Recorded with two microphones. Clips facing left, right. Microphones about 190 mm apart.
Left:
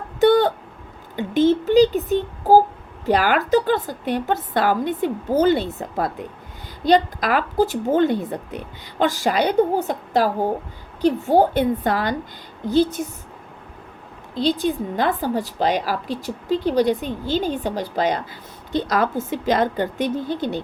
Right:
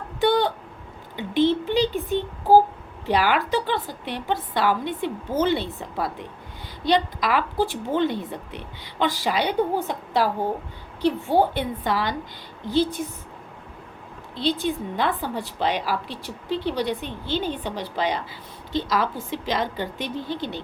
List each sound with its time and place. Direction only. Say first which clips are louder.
0.2 s a sound: left 6 dB; 45° left (ahead or behind)
1.1 s a woman's voice: left 4 dB; 45° left (ahead or behind)
14.3 s a woman's voice: left 4 dB; 40° left (ahead or behind)